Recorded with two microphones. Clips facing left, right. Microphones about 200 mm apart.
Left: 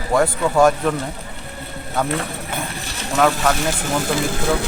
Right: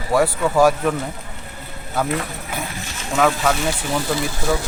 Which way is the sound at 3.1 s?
Centre (ahead or behind).